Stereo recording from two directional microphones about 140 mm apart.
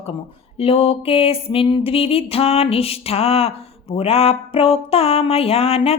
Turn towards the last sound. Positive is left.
turn(degrees=45)  # may be behind; listen again after turning